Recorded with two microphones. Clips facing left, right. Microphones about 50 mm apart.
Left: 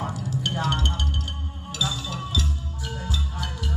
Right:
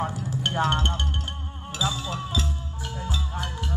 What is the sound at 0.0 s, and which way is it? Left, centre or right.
Music, right.